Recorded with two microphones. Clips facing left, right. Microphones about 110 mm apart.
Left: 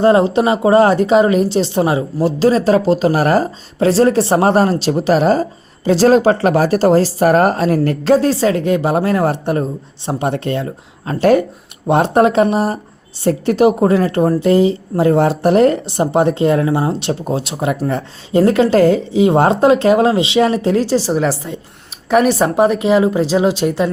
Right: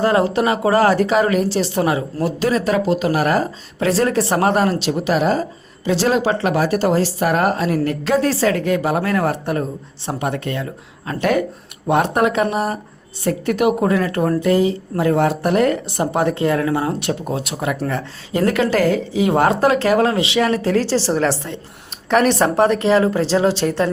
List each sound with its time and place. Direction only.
0.0 s a woman's voice: 25° left (ahead or behind)